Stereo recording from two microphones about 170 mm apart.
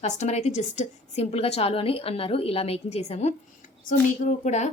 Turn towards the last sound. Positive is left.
turn(degrees=45)  # may be behind; listen again after turning